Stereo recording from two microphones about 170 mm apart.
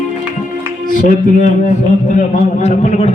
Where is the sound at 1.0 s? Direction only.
50° left (ahead or behind).